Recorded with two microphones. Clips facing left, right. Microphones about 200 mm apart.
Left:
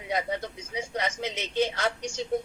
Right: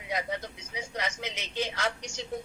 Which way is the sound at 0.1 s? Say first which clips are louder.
Left 3 dB; 30° left (ahead or behind).